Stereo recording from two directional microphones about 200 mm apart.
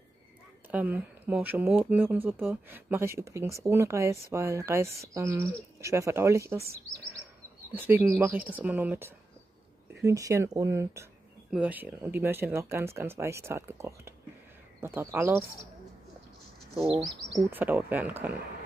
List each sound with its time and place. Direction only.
0.7 s speech: 5° right (ahead or behind)
7.7 s speech: 10° right (ahead or behind)
17.4 s speech: 10° right (ahead or behind)